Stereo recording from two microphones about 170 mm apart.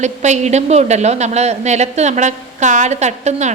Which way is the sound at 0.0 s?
45° right (ahead or behind).